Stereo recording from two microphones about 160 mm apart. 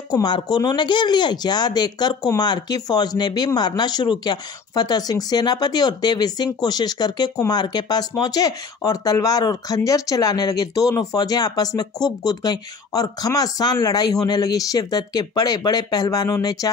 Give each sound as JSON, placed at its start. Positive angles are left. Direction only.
{"t": 0.1, "sound": "speech", "side_deg": 25}